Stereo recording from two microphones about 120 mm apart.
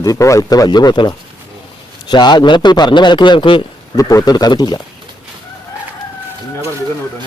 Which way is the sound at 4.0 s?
30° left (ahead or behind).